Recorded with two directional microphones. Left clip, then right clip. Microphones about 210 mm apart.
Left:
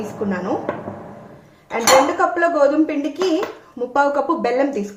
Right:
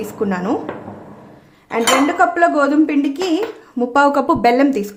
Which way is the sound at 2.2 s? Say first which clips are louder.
Right 2 dB; 45° right (ahead or behind).